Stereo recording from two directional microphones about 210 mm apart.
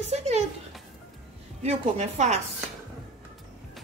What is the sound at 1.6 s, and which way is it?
Speech, 30° right (ahead or behind).